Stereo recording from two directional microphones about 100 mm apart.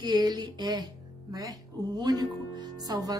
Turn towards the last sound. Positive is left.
turn(degrees=-40)  # may be behind; listen again after turning